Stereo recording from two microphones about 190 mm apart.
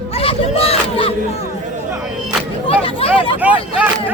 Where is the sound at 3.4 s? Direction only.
10° right (ahead or behind).